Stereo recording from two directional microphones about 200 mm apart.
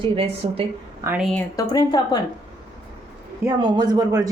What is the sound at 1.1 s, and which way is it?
Speech, 5° right (ahead or behind).